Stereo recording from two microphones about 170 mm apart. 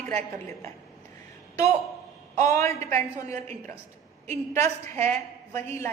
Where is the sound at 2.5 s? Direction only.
15° left (ahead or behind).